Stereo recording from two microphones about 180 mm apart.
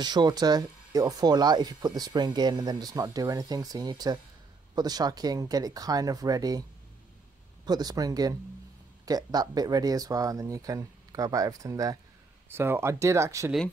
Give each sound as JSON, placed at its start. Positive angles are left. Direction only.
{"t": 0.0, "sound": "speech", "side_deg": -25}
{"t": 7.6, "sound": "speech", "side_deg": -20}